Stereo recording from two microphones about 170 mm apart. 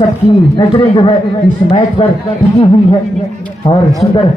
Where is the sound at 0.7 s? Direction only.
30° left (ahead or behind).